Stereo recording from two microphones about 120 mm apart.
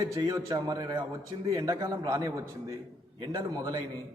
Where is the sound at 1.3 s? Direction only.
50° right (ahead or behind).